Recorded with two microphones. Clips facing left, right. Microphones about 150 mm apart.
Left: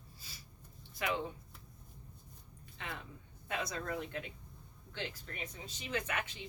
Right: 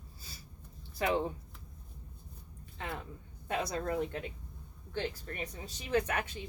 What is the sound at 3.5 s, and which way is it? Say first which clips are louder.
Speech: right 5 dB; 40° right (ahead or behind).